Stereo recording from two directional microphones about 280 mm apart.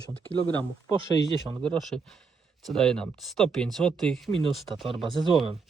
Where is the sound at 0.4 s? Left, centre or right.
Centre.